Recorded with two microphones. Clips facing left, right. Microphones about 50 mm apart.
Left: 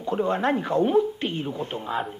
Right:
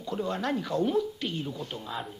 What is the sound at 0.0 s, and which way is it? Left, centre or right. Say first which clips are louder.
A woman's voice: left 7 dB; left.